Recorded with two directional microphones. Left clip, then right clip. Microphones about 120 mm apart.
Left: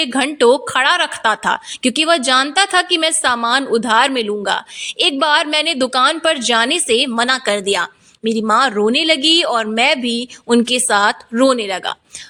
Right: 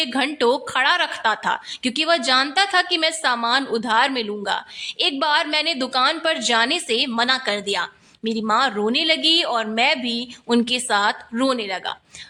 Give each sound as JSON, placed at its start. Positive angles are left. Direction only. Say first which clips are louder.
{"t": 0.0, "sound": "a woman's voice", "louder": "left 6 dB", "side_deg": 40}